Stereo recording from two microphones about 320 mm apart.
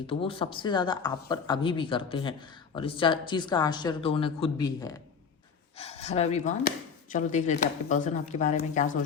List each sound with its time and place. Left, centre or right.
0.1 s speech: centre